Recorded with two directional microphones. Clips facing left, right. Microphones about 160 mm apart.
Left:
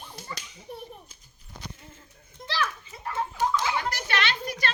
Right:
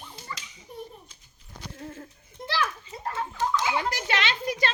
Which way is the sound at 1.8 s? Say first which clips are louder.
Right 11 dB; 65° right (ahead or behind).